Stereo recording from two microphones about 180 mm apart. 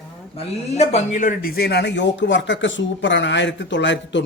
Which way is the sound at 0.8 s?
40° left (ahead or behind).